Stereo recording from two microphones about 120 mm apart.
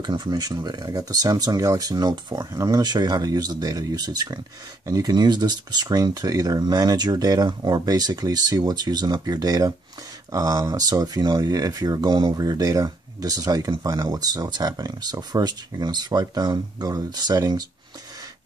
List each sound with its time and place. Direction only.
0.0 s speech: 40° right (ahead or behind)